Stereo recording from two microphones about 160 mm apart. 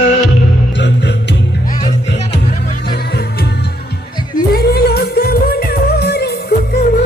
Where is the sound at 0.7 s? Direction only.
90° left.